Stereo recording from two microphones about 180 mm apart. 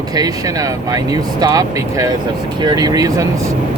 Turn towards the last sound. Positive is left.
turn(degrees=-20)  # may be behind; listen again after turning